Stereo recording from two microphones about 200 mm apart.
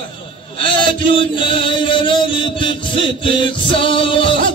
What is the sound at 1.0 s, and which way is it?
Chant, 25° left (ahead or behind).